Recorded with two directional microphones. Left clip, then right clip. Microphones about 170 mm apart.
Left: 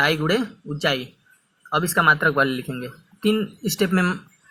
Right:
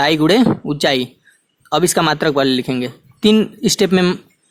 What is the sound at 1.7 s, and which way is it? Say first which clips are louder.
Speech: right 3 dB; 45° right (ahead or behind).